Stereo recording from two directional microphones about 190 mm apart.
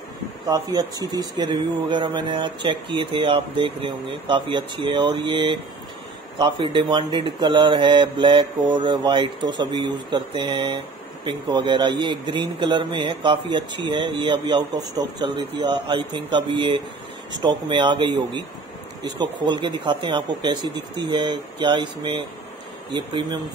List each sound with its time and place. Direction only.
0.5 s speech: 20° right (ahead or behind)
19.4 s speech: 25° right (ahead or behind)